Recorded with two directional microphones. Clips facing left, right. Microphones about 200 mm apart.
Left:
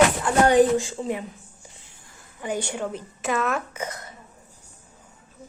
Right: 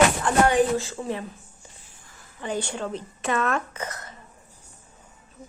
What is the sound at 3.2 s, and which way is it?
Speech, 5° left (ahead or behind).